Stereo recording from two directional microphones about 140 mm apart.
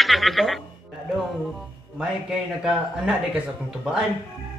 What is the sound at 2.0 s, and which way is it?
Speech, 5° right (ahead or behind).